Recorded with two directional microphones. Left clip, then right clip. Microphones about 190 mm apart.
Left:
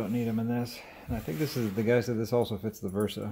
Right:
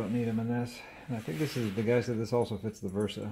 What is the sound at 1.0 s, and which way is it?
Speech, 15° left (ahead or behind).